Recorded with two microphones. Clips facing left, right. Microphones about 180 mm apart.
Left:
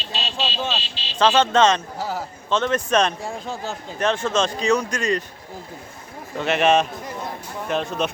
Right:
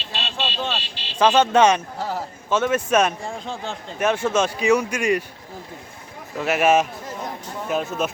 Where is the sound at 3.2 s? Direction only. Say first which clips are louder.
Left 1 dB; 5° left (ahead or behind).